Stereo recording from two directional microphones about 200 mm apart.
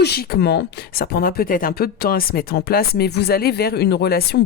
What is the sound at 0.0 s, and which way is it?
Speech, 50° left (ahead or behind).